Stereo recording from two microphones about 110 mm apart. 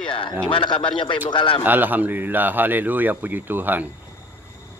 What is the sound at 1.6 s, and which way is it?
Speech, 15° right (ahead or behind).